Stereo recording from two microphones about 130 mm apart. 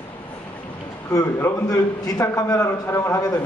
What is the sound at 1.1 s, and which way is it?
A man's voice, 25° left (ahead or behind).